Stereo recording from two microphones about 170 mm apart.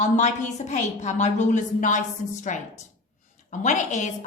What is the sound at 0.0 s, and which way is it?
A woman's voice, 45° left (ahead or behind).